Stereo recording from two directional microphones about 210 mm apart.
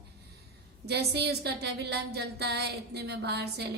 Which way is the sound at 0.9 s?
50° right (ahead or behind).